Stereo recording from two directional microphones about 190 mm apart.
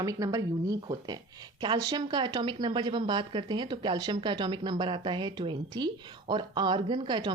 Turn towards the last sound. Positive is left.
turn(degrees=-25)  # may be behind; listen again after turning